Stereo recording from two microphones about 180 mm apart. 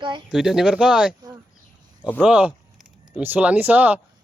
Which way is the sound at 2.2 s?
5° right (ahead or behind).